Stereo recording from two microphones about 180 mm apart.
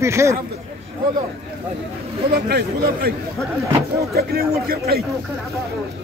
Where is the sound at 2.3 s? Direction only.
60° right (ahead or behind).